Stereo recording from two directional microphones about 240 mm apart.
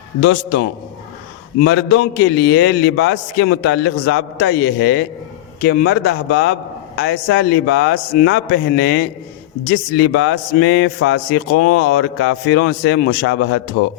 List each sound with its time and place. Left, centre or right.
0.2 s a man's voice: left